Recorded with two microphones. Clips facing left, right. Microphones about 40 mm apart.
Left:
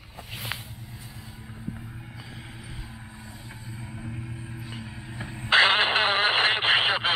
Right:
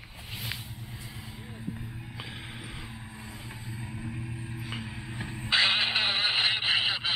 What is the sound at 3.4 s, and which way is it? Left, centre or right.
Music, right.